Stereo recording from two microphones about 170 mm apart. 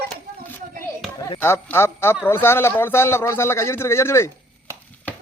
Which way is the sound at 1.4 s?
15° left (ahead or behind).